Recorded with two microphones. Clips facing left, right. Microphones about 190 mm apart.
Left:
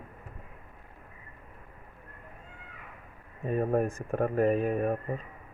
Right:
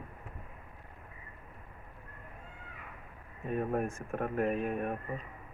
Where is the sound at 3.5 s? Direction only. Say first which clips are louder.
Left 5 dB; 40° left (ahead or behind).